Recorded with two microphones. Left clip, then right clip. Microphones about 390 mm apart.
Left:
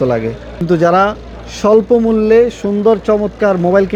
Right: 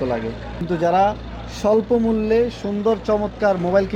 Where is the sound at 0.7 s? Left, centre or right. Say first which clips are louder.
Left 6 dB; left.